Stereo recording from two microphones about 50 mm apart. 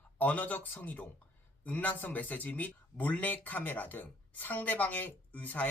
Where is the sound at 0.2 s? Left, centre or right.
Left.